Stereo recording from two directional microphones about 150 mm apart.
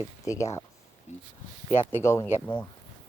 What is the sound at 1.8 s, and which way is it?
Speech, 15° left (ahead or behind).